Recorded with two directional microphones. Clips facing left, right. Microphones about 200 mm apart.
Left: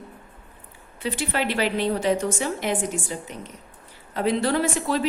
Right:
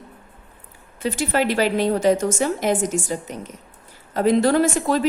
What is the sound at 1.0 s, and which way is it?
A woman's voice, 45° right (ahead or behind).